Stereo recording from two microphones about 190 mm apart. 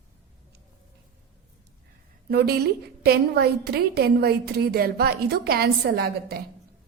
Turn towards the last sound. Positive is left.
turn(degrees=-55)  # may be behind; listen again after turning